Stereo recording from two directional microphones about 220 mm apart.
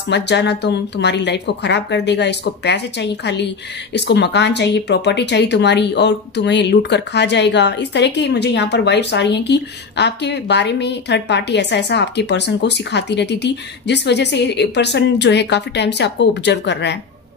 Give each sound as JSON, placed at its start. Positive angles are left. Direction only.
{"t": 0.1, "sound": "speech", "side_deg": 50}